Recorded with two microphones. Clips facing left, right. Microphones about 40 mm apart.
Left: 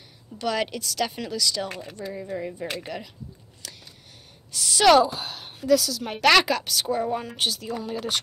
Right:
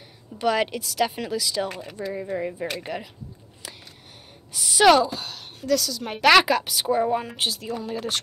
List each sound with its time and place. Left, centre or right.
0.4 s a woman's voice: centre
2.1 s speech: centre
3.6 s a sound: centre
4.5 s speech: centre
4.9 s a woman's voice: centre